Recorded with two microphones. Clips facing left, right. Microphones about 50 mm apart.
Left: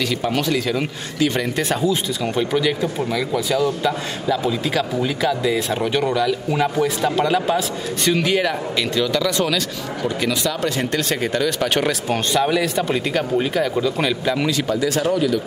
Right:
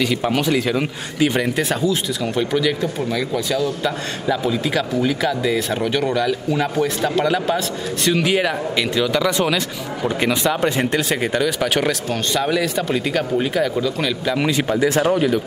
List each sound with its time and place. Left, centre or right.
0.0 s speech: centre
1.7 s a man's voice: centre
3.8 s a man's voice: centre
10.0 s speech: right
11.1 s a man's voice: centre
14.7 s speech: right